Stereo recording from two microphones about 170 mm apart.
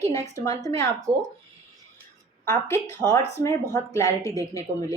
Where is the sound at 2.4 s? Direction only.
15° left (ahead or behind).